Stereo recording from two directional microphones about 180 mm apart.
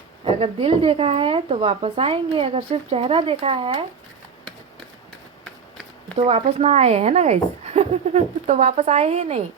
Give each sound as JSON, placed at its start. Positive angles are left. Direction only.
{"t": 0.3, "sound": "speech", "side_deg": -30}
{"t": 6.1, "sound": "speech", "side_deg": -30}